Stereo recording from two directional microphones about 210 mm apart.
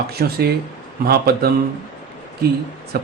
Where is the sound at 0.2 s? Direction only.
50° right (ahead or behind).